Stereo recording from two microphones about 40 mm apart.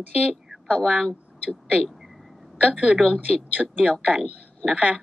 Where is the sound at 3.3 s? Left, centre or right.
Right.